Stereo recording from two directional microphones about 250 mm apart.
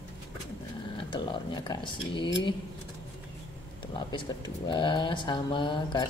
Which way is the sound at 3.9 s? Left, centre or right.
Centre.